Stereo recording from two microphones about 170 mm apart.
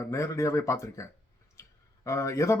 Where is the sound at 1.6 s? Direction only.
20° left (ahead or behind).